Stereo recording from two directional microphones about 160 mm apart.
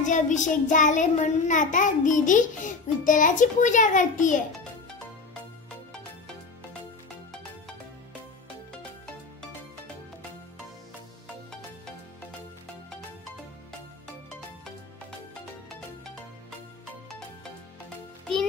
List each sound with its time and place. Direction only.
0.0 s child singing: 50° left (ahead or behind)